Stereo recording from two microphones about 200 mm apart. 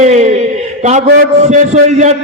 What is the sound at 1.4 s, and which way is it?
Speech, 35° right (ahead or behind).